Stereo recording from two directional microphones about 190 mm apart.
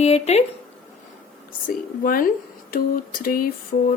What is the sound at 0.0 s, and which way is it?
Speech, 35° left (ahead or behind).